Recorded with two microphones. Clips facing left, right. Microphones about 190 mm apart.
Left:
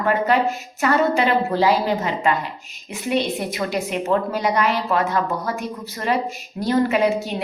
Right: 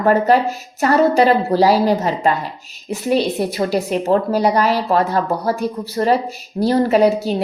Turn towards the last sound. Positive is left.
turn(degrees=-35)  # may be behind; listen again after turning